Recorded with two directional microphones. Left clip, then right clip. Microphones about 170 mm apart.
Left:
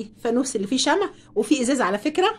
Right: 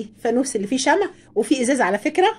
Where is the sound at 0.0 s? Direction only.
10° right (ahead or behind).